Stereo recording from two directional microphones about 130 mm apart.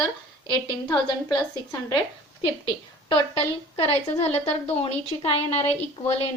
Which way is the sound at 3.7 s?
50° left (ahead or behind).